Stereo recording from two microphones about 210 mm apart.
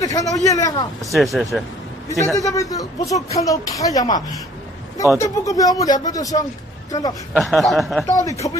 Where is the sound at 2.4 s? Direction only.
15° left (ahead or behind).